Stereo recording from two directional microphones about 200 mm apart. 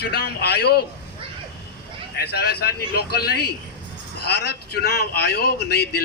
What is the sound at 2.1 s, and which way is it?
A man's voice, 55° left (ahead or behind).